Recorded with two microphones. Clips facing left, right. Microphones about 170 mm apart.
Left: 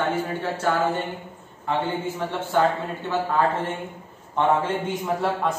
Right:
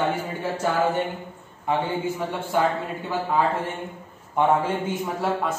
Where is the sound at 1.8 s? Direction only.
10° right (ahead or behind).